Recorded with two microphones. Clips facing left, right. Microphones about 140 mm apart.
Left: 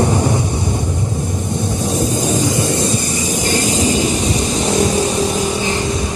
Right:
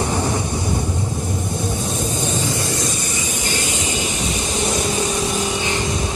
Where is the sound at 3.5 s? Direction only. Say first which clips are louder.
Left 10 dB; 35° left (ahead or behind).